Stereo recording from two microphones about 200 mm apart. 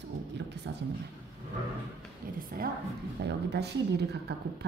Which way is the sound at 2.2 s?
45° right (ahead or behind).